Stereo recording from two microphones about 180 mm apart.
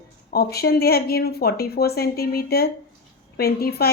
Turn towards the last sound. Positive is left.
turn(degrees=60)  # may be behind; listen again after turning